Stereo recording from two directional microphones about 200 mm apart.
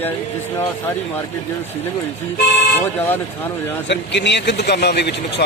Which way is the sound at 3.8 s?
60° left (ahead or behind).